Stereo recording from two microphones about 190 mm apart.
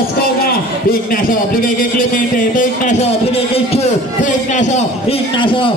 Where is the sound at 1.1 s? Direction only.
45° left (ahead or behind).